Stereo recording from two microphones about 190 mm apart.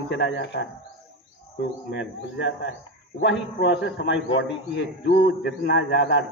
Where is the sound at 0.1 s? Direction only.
65° left (ahead or behind).